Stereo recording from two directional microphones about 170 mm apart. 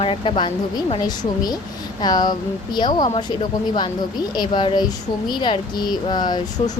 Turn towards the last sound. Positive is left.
turn(degrees=25)  # may be behind; listen again after turning